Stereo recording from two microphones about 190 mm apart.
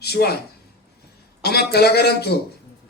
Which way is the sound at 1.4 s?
55° left (ahead or behind).